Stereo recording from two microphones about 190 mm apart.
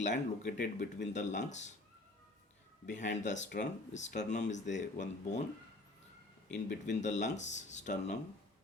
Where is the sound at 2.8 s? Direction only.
40° left (ahead or behind).